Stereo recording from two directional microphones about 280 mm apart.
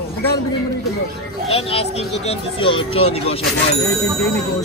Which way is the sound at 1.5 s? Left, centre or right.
Left.